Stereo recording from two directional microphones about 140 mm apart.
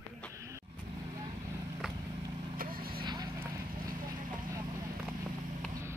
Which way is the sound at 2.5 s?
90° right.